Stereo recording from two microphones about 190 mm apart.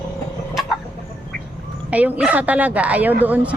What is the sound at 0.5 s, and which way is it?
Chicken, centre (ahead or behind).